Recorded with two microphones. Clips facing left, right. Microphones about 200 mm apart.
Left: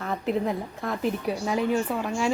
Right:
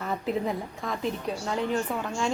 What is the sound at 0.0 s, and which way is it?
A woman's voice, centre (ahead or behind).